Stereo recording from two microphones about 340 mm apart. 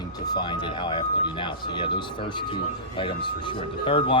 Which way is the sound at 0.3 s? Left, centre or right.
Centre.